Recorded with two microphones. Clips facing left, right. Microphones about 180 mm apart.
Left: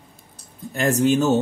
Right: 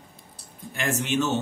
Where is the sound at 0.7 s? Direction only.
40° left (ahead or behind).